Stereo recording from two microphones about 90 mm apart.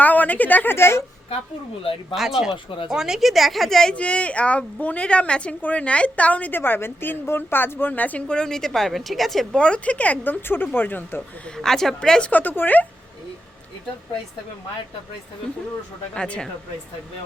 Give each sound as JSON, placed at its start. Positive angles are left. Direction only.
{"t": 0.0, "sound": "a woman's voice", "side_deg": 20}
{"t": 1.8, "sound": "speech", "side_deg": 90}
{"t": 2.6, "sound": "speech", "side_deg": 70}
{"t": 2.9, "sound": "a woman's voice", "side_deg": -5}
{"t": 11.5, "sound": "a woman's voice", "side_deg": 5}
{"t": 16.1, "sound": "a woman's voice", "side_deg": 10}